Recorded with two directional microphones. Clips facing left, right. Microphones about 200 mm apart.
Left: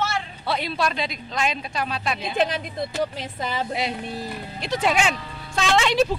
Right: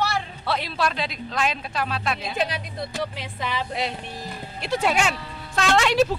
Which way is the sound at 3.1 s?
40° left (ahead or behind).